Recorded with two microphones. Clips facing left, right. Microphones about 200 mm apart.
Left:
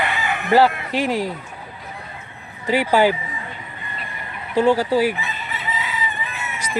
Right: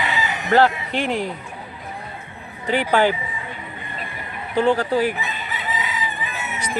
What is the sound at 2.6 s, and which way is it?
Fowl, 5° left (ahead or behind).